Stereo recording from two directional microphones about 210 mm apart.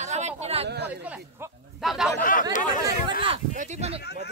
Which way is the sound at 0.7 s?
55° right (ahead or behind).